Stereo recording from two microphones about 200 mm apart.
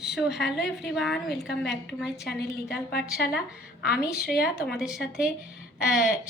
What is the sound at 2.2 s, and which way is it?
Speech, 55° left (ahead or behind).